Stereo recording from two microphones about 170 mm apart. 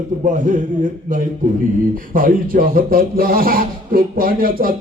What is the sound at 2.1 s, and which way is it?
A man's voice, 55° right (ahead or behind).